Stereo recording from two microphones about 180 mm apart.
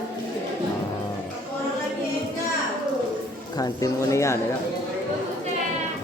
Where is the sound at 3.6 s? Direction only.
20° left (ahead or behind).